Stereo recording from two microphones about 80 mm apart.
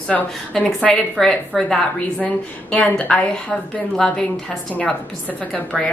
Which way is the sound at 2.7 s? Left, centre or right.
Centre.